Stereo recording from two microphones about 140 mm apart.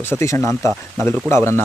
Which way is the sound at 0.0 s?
20° left (ahead or behind).